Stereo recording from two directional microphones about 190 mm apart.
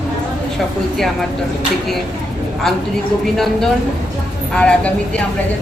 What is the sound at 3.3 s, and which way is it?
Speech, centre (ahead or behind).